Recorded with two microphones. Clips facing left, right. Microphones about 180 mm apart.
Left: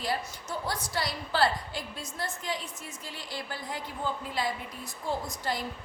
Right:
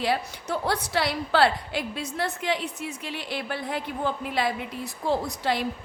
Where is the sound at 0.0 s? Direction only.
70° right (ahead or behind).